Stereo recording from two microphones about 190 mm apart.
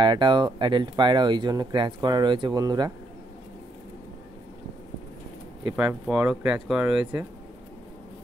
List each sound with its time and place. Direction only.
0.0 s speech: 25° right (ahead or behind)
5.8 s speech: 5° right (ahead or behind)